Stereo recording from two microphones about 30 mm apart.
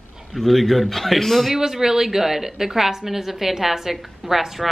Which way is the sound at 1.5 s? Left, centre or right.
Centre.